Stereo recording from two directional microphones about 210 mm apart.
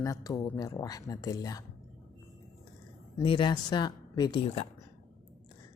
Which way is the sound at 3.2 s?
25° left (ahead or behind).